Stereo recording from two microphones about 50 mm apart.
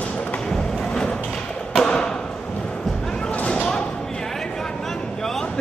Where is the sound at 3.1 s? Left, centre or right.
Centre.